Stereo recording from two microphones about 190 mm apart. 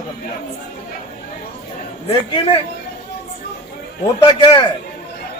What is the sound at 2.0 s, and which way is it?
Speech, 25° left (ahead or behind).